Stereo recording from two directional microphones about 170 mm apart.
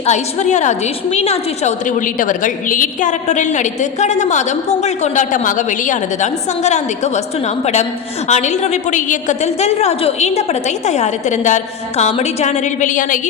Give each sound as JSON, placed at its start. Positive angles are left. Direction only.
{"t": 0.0, "sound": "a woman's voice", "side_deg": 40}